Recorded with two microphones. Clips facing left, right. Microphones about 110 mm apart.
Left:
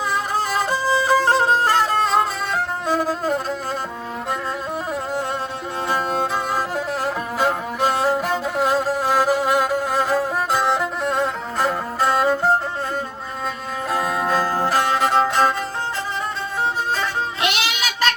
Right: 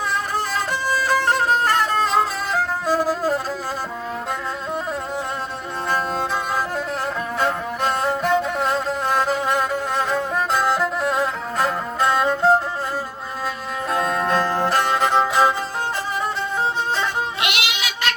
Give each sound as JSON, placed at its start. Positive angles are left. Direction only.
{"t": 0.5, "sound": "violin", "side_deg": 15}
{"t": 1.3, "sound": "music", "side_deg": 30}
{"t": 1.6, "sound": "violin", "side_deg": 0}
{"t": 7.3, "sound": "music", "side_deg": 5}
{"t": 13.9, "sound": "music", "side_deg": 5}
{"t": 17.4, "sound": "music", "side_deg": 35}